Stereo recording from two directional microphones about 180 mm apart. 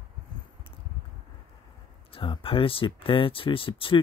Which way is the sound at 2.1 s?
30° left (ahead or behind).